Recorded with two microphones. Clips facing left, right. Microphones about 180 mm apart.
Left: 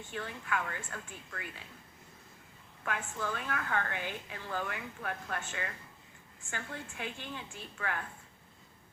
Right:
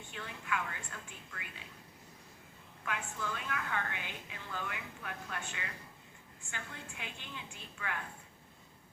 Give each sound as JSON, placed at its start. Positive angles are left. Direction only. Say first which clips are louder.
{"t": 0.1, "sound": "a woman's voice", "louder": "left 3 dB", "side_deg": 45}
{"t": 2.8, "sound": "a woman's voice", "louder": "left 3 dB", "side_deg": 45}